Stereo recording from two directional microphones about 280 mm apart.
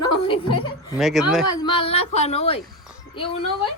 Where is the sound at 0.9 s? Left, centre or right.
Centre.